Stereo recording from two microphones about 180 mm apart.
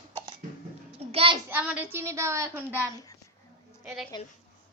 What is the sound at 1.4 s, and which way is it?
A woman's voice, 10° right (ahead or behind).